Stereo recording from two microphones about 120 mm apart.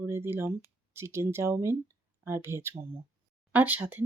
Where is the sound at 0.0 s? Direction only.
20° right (ahead or behind).